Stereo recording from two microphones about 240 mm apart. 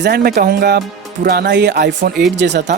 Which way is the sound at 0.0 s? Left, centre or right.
Right.